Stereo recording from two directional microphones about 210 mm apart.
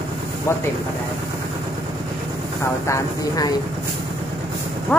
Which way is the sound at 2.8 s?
15° left (ahead or behind).